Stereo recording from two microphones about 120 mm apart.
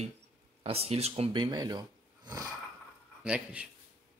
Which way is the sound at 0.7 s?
55° right (ahead or behind).